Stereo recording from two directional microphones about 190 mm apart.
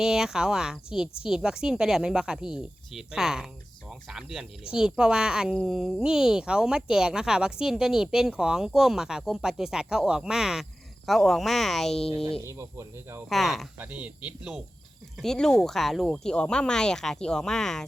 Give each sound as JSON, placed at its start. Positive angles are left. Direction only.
{"t": 0.0, "sound": "speech", "side_deg": -5}
{"t": 12.0, "sound": "speech", "side_deg": 30}
{"t": 12.5, "sound": "speech", "side_deg": -15}
{"t": 13.3, "sound": "speech", "side_deg": 0}